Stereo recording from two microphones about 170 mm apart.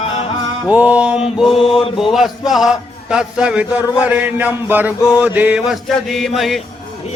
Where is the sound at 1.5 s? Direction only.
35° left (ahead or behind).